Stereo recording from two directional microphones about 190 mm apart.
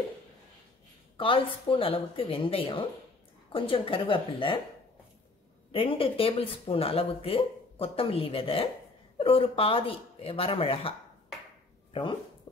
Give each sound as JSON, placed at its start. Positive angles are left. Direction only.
{"t": 1.1, "sound": "speech", "side_deg": 25}
{"t": 5.7, "sound": "speech", "side_deg": 30}